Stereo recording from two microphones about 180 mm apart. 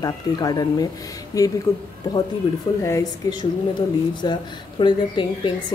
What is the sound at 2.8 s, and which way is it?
A woman's voice, 20° left (ahead or behind).